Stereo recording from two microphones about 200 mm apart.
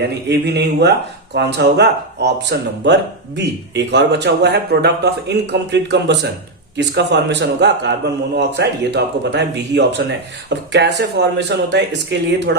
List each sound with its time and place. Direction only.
0.3 s speech: 55° right (ahead or behind)